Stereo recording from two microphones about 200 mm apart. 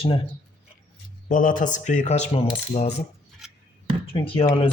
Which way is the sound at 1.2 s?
40° left (ahead or behind).